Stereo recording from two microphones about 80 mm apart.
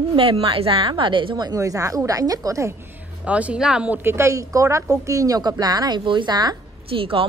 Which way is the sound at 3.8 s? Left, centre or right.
Right.